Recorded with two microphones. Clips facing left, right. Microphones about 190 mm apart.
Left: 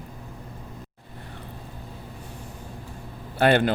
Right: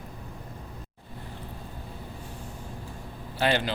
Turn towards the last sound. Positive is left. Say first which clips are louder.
# left 6 dB
turn(degrees=55)  # may be behind; listen again after turning